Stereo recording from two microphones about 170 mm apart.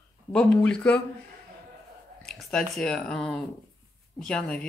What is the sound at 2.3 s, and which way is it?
Speech, 5° left (ahead or behind).